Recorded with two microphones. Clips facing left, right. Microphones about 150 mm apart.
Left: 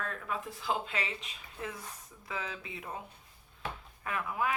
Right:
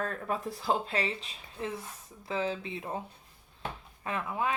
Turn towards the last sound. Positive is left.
turn(degrees=-25)  # may be behind; listen again after turning